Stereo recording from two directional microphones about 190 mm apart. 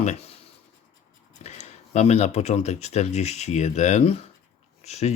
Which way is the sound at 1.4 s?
35° left (ahead or behind).